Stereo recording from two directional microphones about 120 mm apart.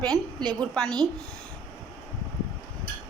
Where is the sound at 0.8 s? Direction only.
35° right (ahead or behind).